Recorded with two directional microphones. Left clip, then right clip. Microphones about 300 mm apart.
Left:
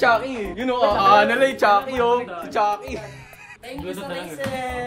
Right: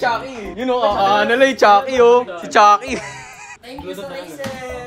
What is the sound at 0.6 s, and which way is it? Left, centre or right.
Speech, centre.